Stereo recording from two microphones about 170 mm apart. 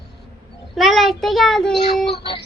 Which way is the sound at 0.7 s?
Centre (ahead or behind).